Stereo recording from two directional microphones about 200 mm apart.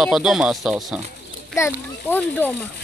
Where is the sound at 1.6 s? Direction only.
10° left (ahead or behind).